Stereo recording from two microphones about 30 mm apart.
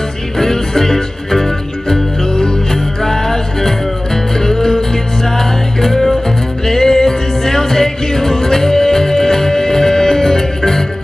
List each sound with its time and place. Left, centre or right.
0.4 s music: centre
2.2 s music: left